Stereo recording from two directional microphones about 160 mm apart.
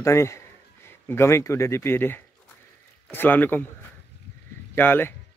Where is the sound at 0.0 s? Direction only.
20° left (ahead or behind).